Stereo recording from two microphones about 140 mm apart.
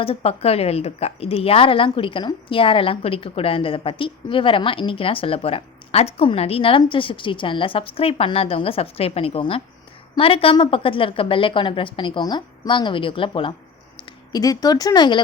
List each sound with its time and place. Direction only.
0.0 s a woman's voice: 45° left (ahead or behind)
13.9 s speech: 25° left (ahead or behind)